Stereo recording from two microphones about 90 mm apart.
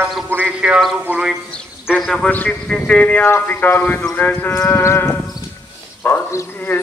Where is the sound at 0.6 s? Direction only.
10° right (ahead or behind).